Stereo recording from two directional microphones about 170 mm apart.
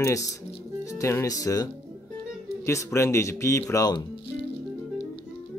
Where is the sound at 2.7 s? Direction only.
15° left (ahead or behind).